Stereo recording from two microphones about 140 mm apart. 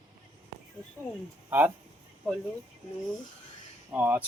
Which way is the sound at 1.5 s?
15° right (ahead or behind).